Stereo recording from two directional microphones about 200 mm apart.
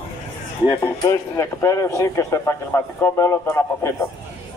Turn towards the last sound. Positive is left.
turn(degrees=15)  # may be behind; listen again after turning